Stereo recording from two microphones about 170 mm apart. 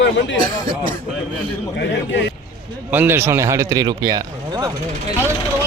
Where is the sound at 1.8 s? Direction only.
90° left.